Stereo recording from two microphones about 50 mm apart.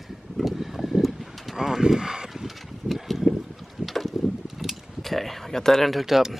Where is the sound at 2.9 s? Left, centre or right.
Centre.